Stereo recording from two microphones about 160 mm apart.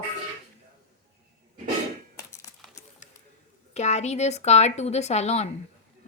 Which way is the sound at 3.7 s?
45° left (ahead or behind).